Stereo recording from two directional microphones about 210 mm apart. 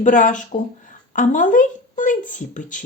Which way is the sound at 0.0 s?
40° left (ahead or behind).